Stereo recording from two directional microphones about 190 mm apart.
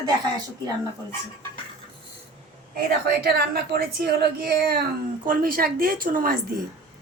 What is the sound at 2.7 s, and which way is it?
A woman's voice, 55° right (ahead or behind).